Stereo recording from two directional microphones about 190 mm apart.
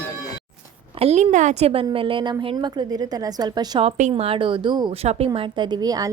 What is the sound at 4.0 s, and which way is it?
A woman's voice, 35° right (ahead or behind).